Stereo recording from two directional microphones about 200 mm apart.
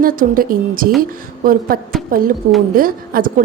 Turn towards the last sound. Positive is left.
turn(degrees=-45)  # may be behind; listen again after turning